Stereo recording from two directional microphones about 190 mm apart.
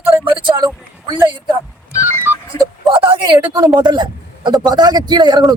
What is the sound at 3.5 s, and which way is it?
A man's voice, 20° right (ahead or behind).